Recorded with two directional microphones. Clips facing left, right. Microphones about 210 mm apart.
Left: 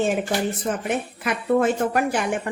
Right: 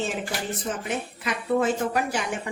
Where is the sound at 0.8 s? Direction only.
55° left (ahead or behind).